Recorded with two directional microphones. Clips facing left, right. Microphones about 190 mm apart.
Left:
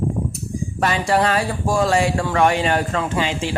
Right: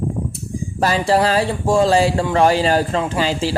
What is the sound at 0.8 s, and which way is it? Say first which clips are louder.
Speech: right 3 dB; 30° right (ahead or behind).